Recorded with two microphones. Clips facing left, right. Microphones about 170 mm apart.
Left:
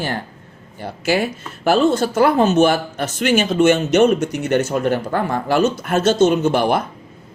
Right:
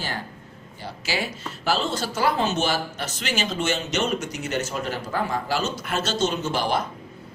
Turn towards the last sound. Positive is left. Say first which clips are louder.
# left 9 dB
turn(degrees=55)  # may be behind; listen again after turning